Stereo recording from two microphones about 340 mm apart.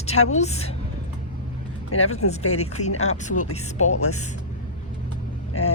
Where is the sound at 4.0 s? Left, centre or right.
Left.